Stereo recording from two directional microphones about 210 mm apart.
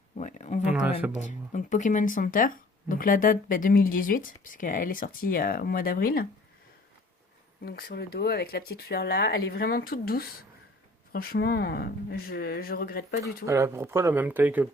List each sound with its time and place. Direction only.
0.2 s speech: 35° left (ahead or behind)
0.6 s speech: 5° right (ahead or behind)
1.2 s speech: 35° left (ahead or behind)
7.6 s speech: 45° left (ahead or behind)
13.4 s speech: 15° right (ahead or behind)